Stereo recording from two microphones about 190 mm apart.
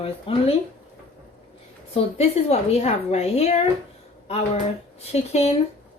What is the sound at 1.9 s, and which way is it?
A woman's voice, 35° left (ahead or behind).